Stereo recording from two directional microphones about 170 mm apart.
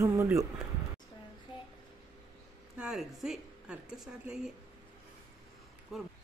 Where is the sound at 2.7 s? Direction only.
5° right (ahead or behind).